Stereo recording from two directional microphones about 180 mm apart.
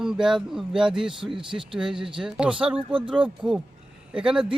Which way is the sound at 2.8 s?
30° right (ahead or behind).